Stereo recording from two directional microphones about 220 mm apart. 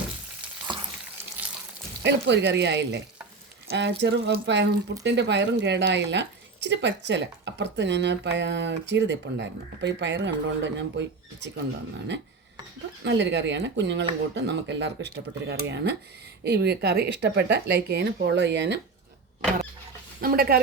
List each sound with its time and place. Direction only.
2.0 s a woman's voice: 55° right (ahead or behind)
13.1 s a woman's voice: 55° right (ahead or behind)
20.2 s a woman's voice: 45° right (ahead or behind)